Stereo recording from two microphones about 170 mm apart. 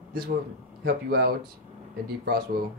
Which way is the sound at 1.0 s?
65° right (ahead or behind).